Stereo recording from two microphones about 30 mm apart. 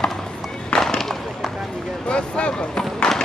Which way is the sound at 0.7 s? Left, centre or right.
Centre.